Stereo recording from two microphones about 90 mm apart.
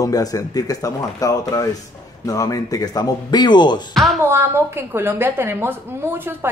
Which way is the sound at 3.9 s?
Centre (ahead or behind).